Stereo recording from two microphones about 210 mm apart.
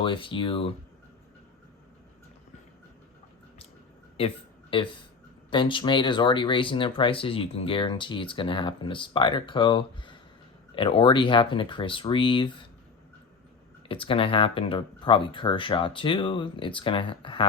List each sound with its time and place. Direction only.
0.0 s speech: 25° left (ahead or behind)
4.7 s speech: 25° left (ahead or behind)
13.8 s speech: 25° left (ahead or behind)